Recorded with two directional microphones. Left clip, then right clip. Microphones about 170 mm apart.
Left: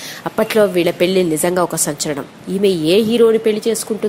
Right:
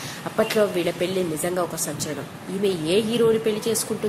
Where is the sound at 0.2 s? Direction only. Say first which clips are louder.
Left 7 dB; 45° left (ahead or behind).